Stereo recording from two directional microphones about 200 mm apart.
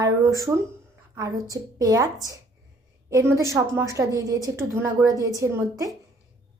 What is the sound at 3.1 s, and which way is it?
A woman's voice, 15° right (ahead or behind).